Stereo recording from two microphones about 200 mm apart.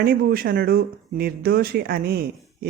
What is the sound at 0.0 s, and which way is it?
Speech, 50° right (ahead or behind).